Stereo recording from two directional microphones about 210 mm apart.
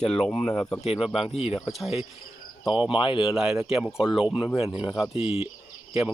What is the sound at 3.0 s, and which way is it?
Speech, 25° left (ahead or behind).